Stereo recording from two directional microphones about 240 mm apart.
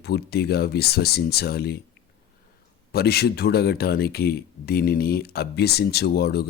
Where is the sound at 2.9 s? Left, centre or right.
Left.